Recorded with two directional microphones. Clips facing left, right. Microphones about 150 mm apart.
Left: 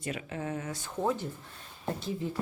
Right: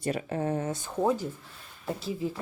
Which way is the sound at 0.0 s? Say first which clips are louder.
Right 6 dB; 35° right (ahead or behind).